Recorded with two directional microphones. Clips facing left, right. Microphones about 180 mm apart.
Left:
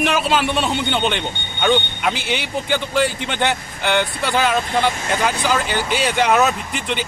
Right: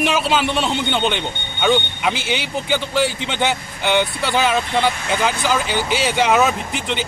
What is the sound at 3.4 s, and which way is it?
Speech, 10° right (ahead or behind).